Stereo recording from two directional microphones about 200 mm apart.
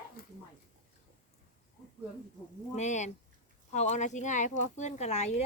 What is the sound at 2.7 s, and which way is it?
Speech, 35° left (ahead or behind).